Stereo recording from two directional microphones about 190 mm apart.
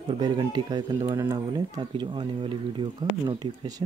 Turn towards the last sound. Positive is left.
turn(degrees=-20)  # may be behind; listen again after turning